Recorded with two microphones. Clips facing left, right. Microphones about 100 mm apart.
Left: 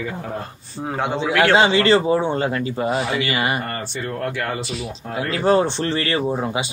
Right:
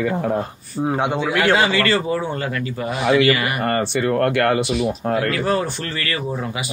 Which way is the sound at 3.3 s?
25° left (ahead or behind).